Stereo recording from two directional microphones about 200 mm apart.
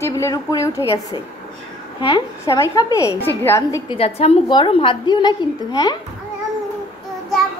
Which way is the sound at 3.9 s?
30° left (ahead or behind).